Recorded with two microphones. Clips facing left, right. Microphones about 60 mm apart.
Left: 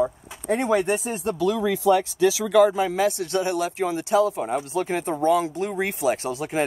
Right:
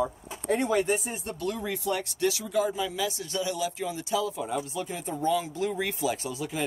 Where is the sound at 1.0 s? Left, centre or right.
Left.